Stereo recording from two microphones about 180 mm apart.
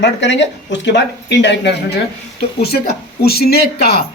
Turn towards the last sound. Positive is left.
turn(degrees=60)  # may be behind; listen again after turning